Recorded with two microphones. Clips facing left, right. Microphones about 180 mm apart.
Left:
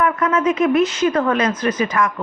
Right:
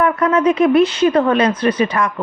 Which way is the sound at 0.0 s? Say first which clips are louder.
Right 3 dB; 35° right (ahead or behind).